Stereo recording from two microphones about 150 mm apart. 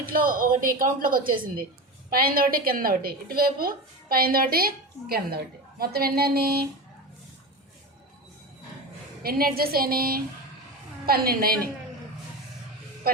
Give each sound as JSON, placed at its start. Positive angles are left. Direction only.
{"t": 0.0, "sound": "a woman's voice", "side_deg": -70}
{"t": 5.8, "sound": "a sound", "side_deg": -90}
{"t": 9.2, "sound": "a woman's voice", "side_deg": -90}
{"t": 13.0, "sound": "goose", "side_deg": -85}